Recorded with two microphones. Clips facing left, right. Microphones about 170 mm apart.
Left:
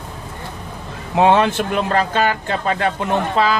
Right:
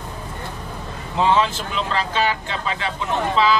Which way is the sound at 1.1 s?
60° left (ahead or behind).